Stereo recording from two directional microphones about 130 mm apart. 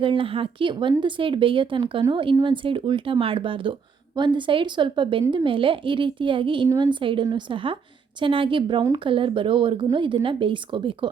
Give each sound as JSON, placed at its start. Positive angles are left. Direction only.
{"t": 0.0, "sound": "speech", "side_deg": -40}